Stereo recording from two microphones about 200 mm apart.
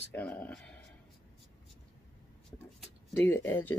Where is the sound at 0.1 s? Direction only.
5° left (ahead or behind).